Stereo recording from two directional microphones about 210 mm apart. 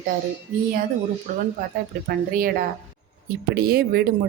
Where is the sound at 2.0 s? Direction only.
40° right (ahead or behind).